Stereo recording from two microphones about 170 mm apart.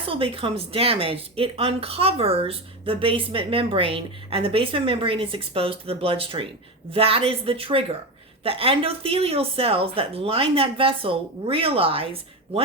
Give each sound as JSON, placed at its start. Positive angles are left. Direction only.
{"t": 0.0, "sound": "a woman's voice", "side_deg": -35}